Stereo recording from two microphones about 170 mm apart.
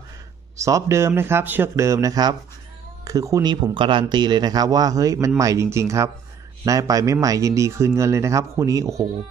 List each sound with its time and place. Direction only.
0.6 s speech: 20° right (ahead or behind)